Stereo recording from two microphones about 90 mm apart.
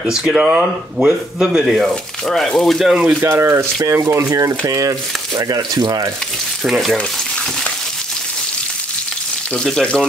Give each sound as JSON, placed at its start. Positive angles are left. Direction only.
{"t": 0.0, "sound": "speech", "side_deg": -10}
{"t": 3.2, "sound": "speech", "side_deg": -30}
{"t": 6.6, "sound": "speech", "side_deg": 0}
{"t": 9.5, "sound": "speech", "side_deg": 10}